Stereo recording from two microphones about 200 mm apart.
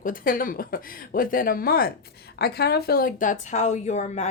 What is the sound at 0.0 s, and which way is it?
A woman's voice, 45° left (ahead or behind).